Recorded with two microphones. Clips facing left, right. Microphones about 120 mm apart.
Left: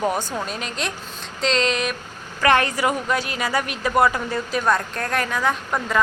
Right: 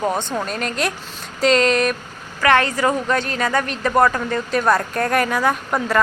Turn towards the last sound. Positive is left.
turn(degrees=-5)  # may be behind; listen again after turning